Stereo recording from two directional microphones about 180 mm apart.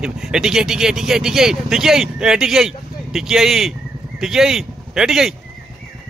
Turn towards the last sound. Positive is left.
turn(degrees=-5)  # may be behind; listen again after turning